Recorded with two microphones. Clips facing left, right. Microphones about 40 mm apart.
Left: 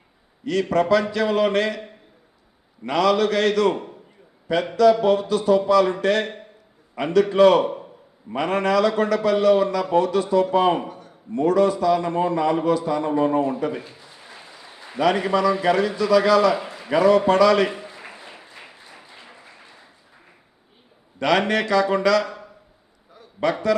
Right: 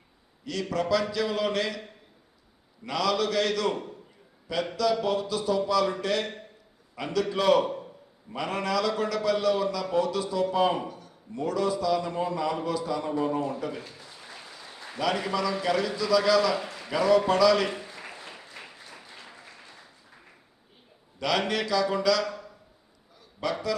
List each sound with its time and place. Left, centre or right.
0.4 s a man's voice: left
2.8 s a man's voice: left
7.6 s a man's voice: centre
8.4 s a man's voice: left
13.9 s applause: centre
14.9 s a man's voice: left
17.8 s applause: centre
21.2 s a man's voice: left
23.1 s a sound: left